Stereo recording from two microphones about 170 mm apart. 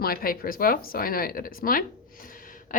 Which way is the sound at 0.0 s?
60° left (ahead or behind).